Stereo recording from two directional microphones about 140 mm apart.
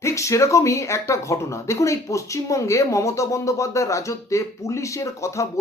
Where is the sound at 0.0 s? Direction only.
20° left (ahead or behind).